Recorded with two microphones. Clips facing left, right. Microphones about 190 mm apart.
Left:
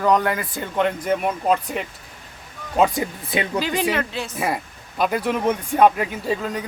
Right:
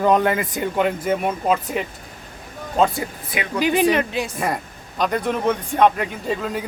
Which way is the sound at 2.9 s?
25° left (ahead or behind).